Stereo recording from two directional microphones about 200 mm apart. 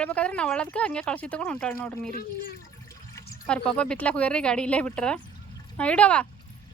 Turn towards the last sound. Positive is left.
turn(degrees=5)  # may be behind; listen again after turning